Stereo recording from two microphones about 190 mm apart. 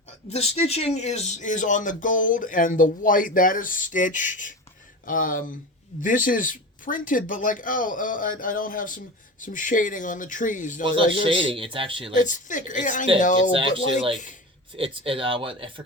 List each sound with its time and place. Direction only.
0.3 s speech: 35° left (ahead or behind)
10.8 s a man's voice: 25° right (ahead or behind)
12.1 s a woman's voice: 40° left (ahead or behind)
14.8 s a man's voice: 30° right (ahead or behind)